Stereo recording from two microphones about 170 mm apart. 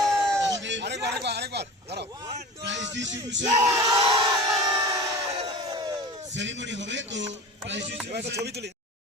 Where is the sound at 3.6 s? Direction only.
20° right (ahead or behind).